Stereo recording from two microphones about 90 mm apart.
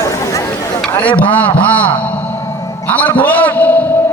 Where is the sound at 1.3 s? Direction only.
15° left (ahead or behind).